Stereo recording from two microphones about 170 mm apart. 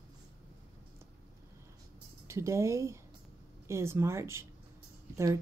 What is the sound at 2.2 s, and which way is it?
A woman's voice, 15° right (ahead or behind).